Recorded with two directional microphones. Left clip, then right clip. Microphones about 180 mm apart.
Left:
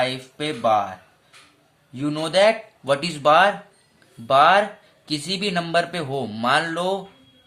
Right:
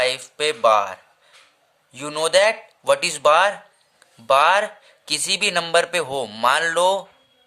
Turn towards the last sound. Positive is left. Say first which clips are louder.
# right 3 dB
turn(degrees=-50)  # may be behind; listen again after turning